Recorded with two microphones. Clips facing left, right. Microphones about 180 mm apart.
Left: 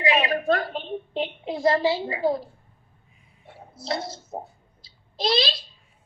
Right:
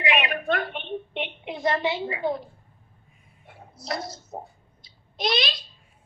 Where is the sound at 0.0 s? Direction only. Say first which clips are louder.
Left 3 dB; 30° left (ahead or behind).